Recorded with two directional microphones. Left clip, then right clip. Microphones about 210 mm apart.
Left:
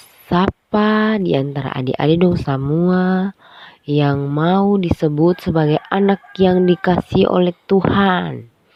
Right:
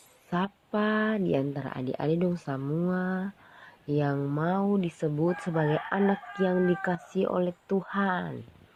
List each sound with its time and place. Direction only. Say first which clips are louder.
0.3 s speech: left 14 dB; 50° left (ahead or behind)